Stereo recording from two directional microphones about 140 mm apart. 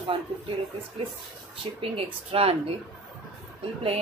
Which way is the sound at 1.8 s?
40° right (ahead or behind).